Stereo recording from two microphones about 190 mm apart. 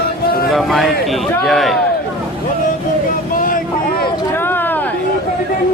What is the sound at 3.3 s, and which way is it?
Vehicle, 45° left (ahead or behind).